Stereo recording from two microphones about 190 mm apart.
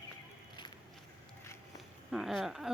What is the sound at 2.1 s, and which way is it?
Speech, centre (ahead or behind).